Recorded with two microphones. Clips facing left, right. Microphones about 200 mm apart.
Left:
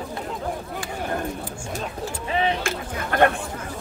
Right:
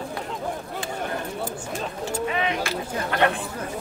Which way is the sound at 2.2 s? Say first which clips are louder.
Left 3 dB; 30° left (ahead or behind).